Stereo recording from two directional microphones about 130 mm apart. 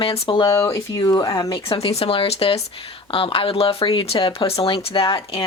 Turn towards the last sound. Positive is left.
turn(degrees=45)  # may be behind; listen again after turning